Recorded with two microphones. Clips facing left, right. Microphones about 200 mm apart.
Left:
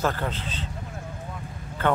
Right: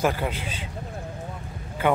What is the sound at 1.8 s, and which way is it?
Speech, 10° right (ahead or behind).